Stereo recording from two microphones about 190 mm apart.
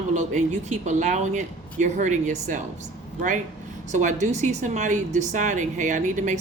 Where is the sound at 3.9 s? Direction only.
40° right (ahead or behind).